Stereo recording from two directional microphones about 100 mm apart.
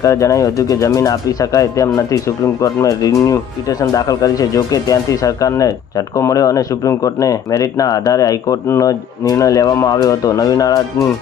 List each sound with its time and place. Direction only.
0.0 s speech: 30° left (ahead or behind)